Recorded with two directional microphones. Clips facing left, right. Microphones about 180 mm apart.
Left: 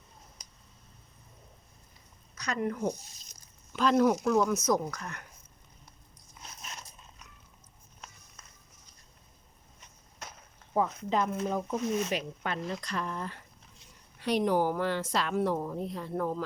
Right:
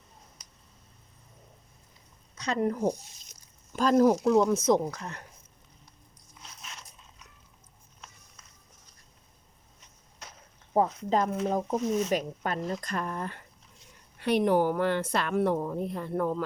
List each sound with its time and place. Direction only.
2.3 s a sound: 25° right (ahead or behind)
2.6 s speech: 40° right (ahead or behind)
6.4 s biting: 45° left (ahead or behind)
10.8 s speech: 40° right (ahead or behind); by 16.4 s 55° right (ahead or behind)